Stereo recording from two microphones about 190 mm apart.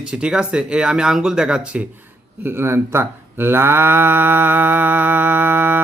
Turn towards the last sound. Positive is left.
turn(degrees=-10)  # may be behind; listen again after turning